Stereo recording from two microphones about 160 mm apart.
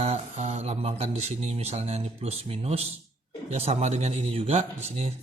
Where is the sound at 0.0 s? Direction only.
40° right (ahead or behind).